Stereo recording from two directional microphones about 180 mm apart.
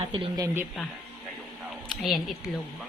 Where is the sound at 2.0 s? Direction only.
Centre (ahead or behind).